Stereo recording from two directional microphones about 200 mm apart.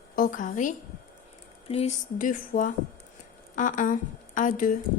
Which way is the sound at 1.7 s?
30° left (ahead or behind).